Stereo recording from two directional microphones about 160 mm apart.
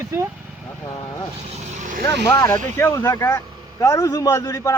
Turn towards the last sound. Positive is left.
turn(degrees=20)  # may be behind; listen again after turning